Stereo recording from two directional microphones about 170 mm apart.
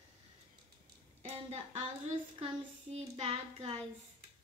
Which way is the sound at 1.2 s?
40° right (ahead or behind).